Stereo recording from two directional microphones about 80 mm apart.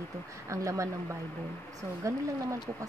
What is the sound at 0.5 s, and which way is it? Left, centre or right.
Speech, right.